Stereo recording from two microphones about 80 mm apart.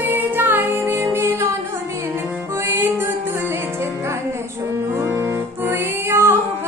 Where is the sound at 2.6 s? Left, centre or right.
Right.